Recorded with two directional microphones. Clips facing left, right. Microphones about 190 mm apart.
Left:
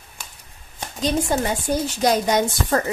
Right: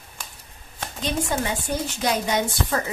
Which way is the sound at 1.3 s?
40° left (ahead or behind).